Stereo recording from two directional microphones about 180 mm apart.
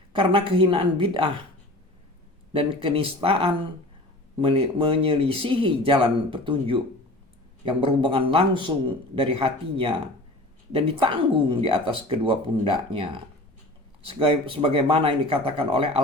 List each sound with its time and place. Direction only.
0.1 s speech: 30° right (ahead or behind)
2.5 s speech: 30° right (ahead or behind)